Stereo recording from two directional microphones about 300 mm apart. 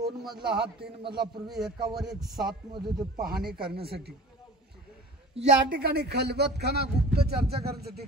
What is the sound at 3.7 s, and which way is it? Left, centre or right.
Speech, right.